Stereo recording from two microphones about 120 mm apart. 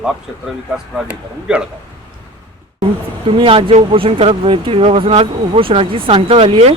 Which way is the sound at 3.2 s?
50° right (ahead or behind).